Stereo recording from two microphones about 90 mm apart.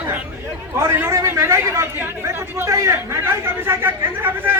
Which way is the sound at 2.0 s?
25° right (ahead or behind).